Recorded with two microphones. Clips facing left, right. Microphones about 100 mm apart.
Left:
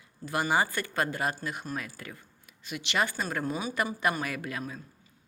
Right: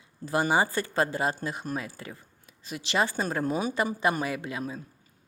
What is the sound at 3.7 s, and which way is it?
Speech, 25° right (ahead or behind).